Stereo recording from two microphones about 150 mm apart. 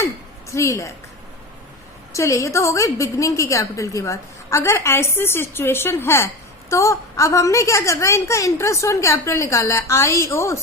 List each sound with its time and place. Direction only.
0.5 s a woman's voice: 20° left (ahead or behind)
2.1 s a woman's voice: 20° left (ahead or behind)